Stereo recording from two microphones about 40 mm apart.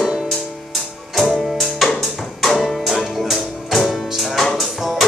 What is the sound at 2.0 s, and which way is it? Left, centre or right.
Music, centre.